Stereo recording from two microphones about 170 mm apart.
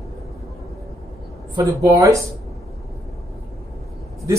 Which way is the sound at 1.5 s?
20° right (ahead or behind).